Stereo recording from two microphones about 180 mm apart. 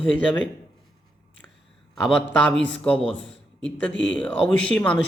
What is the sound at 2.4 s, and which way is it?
Speech, 5° left (ahead or behind).